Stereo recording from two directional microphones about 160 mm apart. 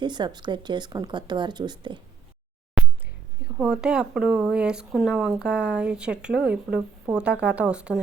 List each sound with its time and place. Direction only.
0.0 s speech: 30° right (ahead or behind)
2.8 s a sound: 5° right (ahead or behind)
3.6 s speech: 5° right (ahead or behind)